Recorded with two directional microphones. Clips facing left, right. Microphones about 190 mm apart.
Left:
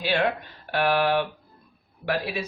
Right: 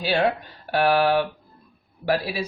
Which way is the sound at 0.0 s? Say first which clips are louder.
Right 3 dB; 40° right (ahead or behind).